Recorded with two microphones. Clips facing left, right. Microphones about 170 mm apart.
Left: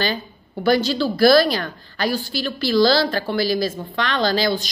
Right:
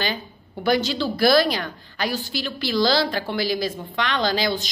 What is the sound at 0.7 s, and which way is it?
A woman's voice, 20° right (ahead or behind).